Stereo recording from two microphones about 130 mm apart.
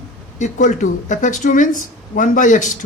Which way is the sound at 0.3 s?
70° left (ahead or behind).